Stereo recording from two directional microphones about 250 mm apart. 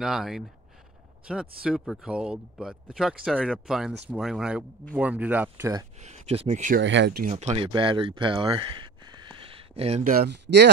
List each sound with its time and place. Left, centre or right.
0.0 s speech: centre
5.9 s speech: right
6.8 s speech: right
7.3 s speech: right